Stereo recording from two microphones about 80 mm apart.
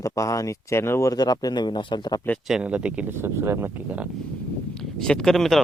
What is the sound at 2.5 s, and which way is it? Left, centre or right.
Speech, centre.